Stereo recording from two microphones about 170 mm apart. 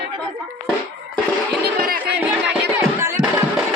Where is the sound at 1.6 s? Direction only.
60° right (ahead or behind).